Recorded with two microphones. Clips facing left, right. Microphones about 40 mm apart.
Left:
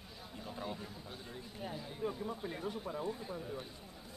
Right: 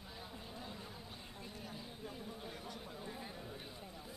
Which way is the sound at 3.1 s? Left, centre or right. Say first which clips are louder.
Left 6 dB; centre.